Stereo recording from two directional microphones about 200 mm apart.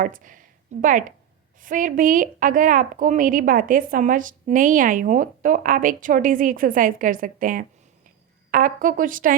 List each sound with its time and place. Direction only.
0.0 s a woman's voice: 40° right (ahead or behind)